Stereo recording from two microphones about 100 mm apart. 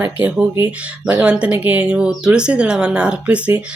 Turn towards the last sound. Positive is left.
turn(degrees=-15)  # may be behind; listen again after turning